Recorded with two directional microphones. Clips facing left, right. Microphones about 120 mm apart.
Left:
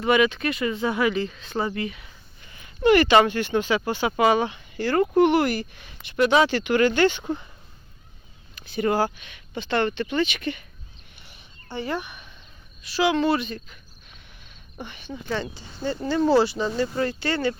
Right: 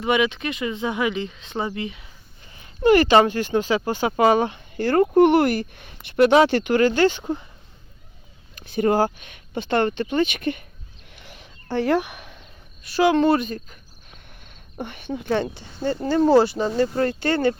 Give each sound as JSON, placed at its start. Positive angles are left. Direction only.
{"t": 0.0, "sound": "speech", "side_deg": -15}
{"t": 2.4, "sound": "speech", "side_deg": -35}
{"t": 8.5, "sound": "speech", "side_deg": -45}
{"t": 11.2, "sound": "a sound", "side_deg": -90}
{"t": 12.8, "sound": "speech", "side_deg": -50}